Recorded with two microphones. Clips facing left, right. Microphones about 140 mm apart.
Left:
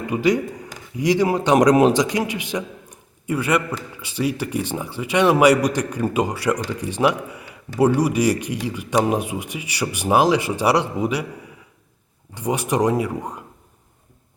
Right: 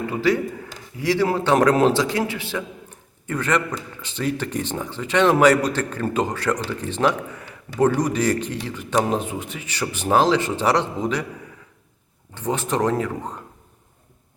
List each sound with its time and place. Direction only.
0.1 s a man's voice: 15° left (ahead or behind)
12.3 s a man's voice: 10° left (ahead or behind)